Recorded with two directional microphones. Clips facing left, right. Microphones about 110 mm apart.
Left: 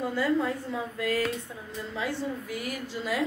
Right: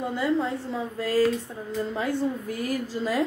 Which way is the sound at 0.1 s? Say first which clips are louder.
Right 2 dB; 25° right (ahead or behind).